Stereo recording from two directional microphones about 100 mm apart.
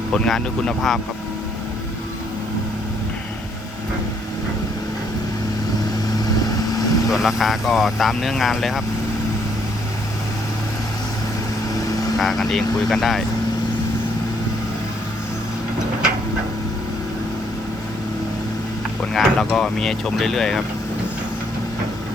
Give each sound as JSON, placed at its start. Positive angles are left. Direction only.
{"t": 0.1, "sound": "speech", "side_deg": 5}
{"t": 6.4, "sound": "vehicle", "side_deg": 40}
{"t": 7.1, "sound": "speech", "side_deg": -5}
{"t": 12.2, "sound": "speech", "side_deg": 0}
{"t": 19.1, "sound": "speech", "side_deg": 5}